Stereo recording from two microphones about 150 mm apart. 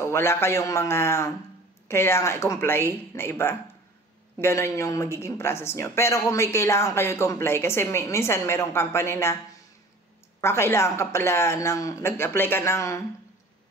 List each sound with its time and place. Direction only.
0.0 s speech: 15° left (ahead or behind)